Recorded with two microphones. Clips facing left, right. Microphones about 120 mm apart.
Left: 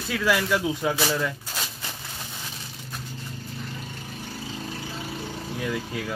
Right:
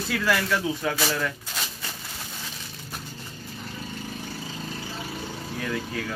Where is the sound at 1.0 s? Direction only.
10° left (ahead or behind).